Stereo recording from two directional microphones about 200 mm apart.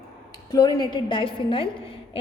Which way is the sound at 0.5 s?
20° left (ahead or behind).